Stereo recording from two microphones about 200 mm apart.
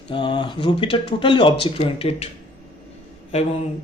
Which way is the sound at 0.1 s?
25° left (ahead or behind).